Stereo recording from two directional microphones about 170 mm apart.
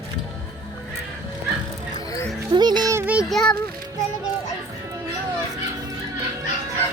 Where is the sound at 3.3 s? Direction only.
5° left (ahead or behind).